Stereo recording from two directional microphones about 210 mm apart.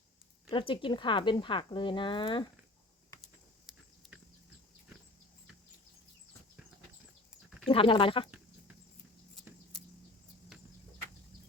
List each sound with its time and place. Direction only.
0.5 s speech: 25° left (ahead or behind)
3.7 s a sound: centre (ahead or behind)
7.7 s speech: 25° left (ahead or behind)
9.3 s mouse: centre (ahead or behind)